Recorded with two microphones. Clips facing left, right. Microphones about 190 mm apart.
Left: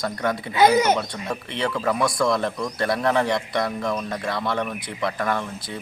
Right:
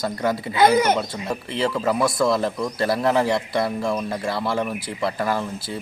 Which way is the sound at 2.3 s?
5° right (ahead or behind).